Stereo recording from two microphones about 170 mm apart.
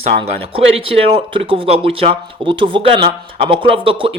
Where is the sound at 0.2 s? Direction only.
35° right (ahead or behind).